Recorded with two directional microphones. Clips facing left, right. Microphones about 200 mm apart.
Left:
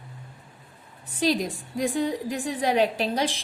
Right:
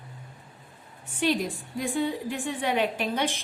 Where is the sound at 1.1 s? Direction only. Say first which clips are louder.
Left 2 dB; 40° left (ahead or behind).